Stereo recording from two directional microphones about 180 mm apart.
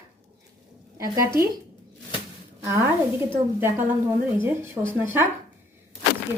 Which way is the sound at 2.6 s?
15° right (ahead or behind).